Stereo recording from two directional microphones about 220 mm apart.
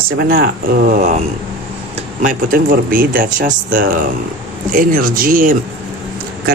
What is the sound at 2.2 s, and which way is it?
Speech, 40° right (ahead or behind).